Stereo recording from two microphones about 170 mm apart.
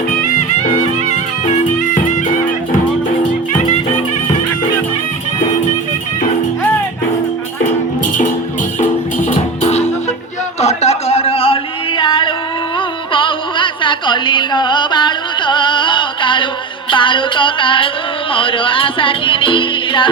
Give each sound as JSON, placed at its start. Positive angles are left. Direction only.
{"t": 1.1, "sound": "music", "side_deg": 45}
{"t": 9.3, "sound": "music", "side_deg": 40}
{"t": 10.6, "sound": "a sound", "side_deg": 40}
{"t": 16.9, "sound": "music", "side_deg": 30}